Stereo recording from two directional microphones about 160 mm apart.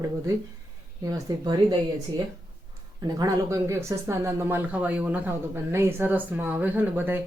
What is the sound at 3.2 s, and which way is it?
Speech, 20° right (ahead or behind).